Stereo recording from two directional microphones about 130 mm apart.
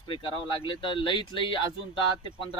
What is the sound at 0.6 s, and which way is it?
Speech, 40° left (ahead or behind).